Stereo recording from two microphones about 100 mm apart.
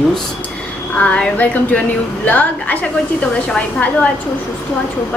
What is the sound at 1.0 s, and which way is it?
A woman's voice, 10° left (ahead or behind).